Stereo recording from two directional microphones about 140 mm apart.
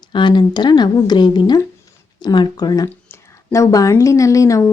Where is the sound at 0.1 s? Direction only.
35° left (ahead or behind).